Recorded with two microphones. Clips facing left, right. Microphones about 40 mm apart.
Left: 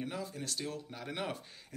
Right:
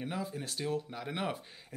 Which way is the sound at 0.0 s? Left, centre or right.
Centre.